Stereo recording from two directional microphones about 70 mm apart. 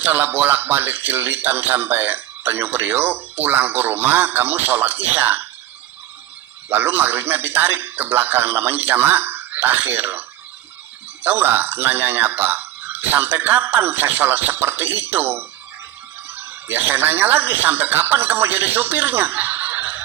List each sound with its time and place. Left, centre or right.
0.0 s speech: right
6.7 s speech: right